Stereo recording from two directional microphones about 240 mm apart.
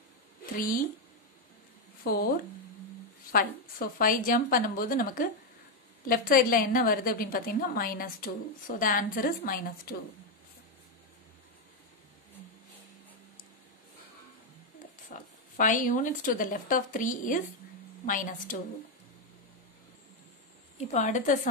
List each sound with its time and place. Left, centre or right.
2.0 s a woman's voice: left
3.3 s a woman's voice: left
15.0 s a woman's voice: left
20.7 s a woman's voice: left